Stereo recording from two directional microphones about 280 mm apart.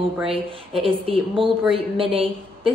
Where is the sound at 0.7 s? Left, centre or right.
Centre.